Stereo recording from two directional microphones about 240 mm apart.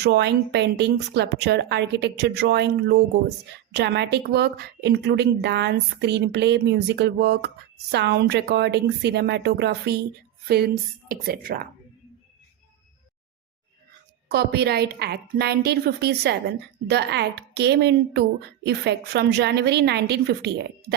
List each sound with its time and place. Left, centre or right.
0.0 s a woman's voice: right
14.3 s a woman's voice: right